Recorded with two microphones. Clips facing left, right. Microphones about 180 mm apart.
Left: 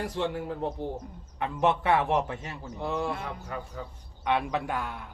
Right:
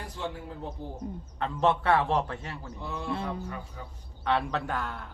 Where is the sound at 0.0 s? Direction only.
80° left.